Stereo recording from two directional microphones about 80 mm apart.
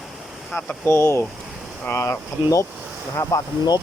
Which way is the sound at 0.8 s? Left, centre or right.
Left.